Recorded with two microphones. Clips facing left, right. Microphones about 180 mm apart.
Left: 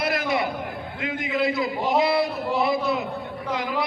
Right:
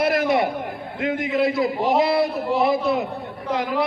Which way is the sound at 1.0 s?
50° right (ahead or behind).